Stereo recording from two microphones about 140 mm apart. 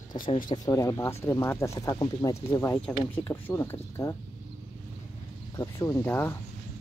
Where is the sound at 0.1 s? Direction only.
50° left (ahead or behind).